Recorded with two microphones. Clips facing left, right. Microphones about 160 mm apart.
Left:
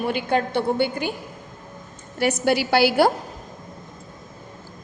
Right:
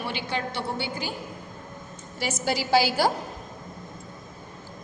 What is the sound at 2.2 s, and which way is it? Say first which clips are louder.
Speech: left 7 dB; 60° left (ahead or behind).